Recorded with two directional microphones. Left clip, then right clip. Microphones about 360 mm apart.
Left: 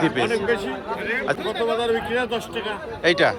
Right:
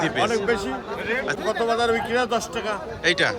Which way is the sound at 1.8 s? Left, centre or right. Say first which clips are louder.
Right 1 dB; centre.